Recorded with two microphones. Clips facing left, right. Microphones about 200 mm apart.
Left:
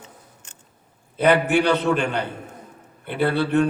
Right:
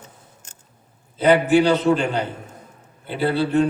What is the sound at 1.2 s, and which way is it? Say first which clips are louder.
Speech: right 2 dB; 60° left (ahead or behind).